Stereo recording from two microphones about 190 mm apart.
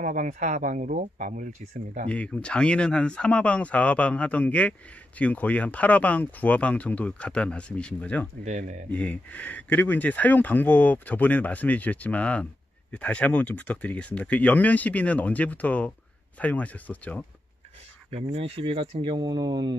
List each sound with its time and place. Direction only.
0.0 s speech: 40° right (ahead or behind)
2.0 s speech: 5° left (ahead or behind)
8.5 s speech: 40° right (ahead or behind)
8.9 s speech: 10° left (ahead or behind)
18.1 s speech: 30° right (ahead or behind)